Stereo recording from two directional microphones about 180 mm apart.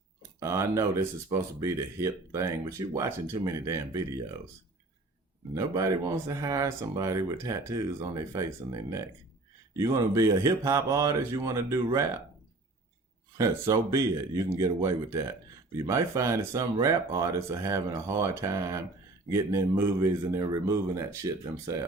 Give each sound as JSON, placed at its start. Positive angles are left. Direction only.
{"t": 0.3, "sound": "speech", "side_deg": -15}
{"t": 5.5, "sound": "speech", "side_deg": -20}
{"t": 13.3, "sound": "speech", "side_deg": -20}